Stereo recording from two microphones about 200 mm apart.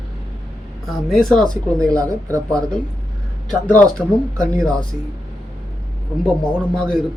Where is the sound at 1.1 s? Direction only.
Centre (ahead or behind).